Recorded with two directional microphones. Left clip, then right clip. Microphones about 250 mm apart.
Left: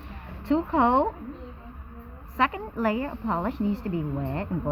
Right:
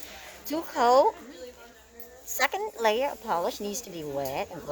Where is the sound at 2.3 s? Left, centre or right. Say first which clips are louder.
Left 2 dB; right.